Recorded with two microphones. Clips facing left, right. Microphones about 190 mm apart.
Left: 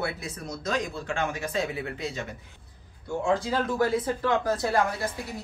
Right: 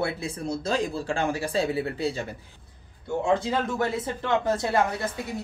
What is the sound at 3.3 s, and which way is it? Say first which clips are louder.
Speech: even; 25° right (ahead or behind).